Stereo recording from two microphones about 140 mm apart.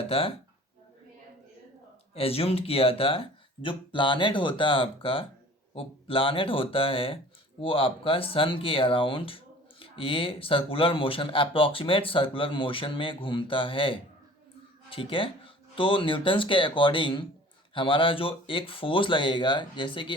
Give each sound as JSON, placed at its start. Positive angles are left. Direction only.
{"t": 0.1, "sound": "speech", "side_deg": 45}
{"t": 2.1, "sound": "speech", "side_deg": 45}